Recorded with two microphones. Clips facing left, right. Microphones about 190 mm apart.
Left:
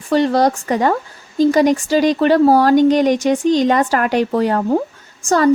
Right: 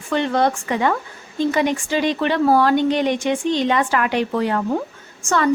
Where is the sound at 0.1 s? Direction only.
40° left (ahead or behind).